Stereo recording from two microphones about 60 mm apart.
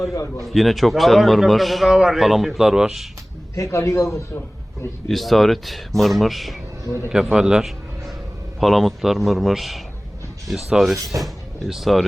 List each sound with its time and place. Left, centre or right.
0.3 s a man's voice: centre
3.5 s a man's voice: left
5.0 s a man's voice: centre
8.6 s a man's voice: centre